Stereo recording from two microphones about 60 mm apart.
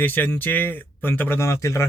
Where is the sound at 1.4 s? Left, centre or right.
Left.